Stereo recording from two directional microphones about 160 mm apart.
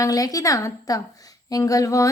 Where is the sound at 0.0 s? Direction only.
20° left (ahead or behind).